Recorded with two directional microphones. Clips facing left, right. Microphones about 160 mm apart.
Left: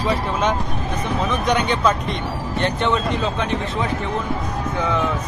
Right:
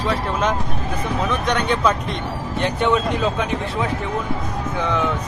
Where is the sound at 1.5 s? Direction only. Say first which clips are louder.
Left 1 dB; centre (ahead or behind).